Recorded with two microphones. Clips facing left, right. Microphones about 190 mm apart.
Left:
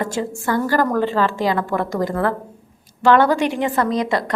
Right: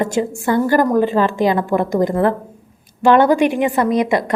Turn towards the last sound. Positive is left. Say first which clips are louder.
# right 4 dB
turn(degrees=-20)  # may be behind; listen again after turning